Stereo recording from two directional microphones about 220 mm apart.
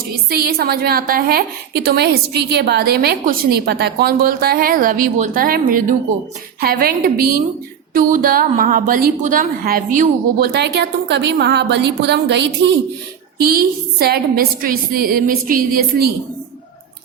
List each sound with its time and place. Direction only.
0.3 s a woman's voice: 45° right (ahead or behind)